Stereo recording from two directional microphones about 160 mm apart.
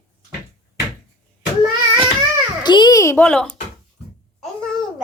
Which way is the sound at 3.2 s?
5° left (ahead or behind).